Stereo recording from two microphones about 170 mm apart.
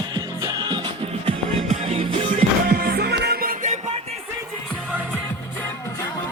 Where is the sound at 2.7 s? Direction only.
65° right (ahead or behind).